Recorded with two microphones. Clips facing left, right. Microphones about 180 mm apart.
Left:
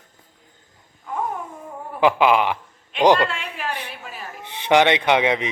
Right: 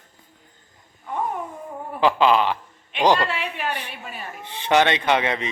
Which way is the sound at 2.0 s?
15° left (ahead or behind).